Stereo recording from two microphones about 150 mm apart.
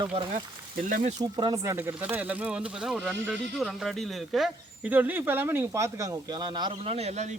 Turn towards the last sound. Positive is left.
turn(degrees=-45)  # may be behind; listen again after turning